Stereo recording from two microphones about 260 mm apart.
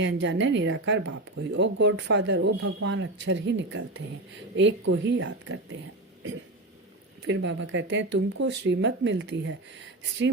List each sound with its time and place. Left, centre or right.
0.0 s speech: right
7.3 s speech: right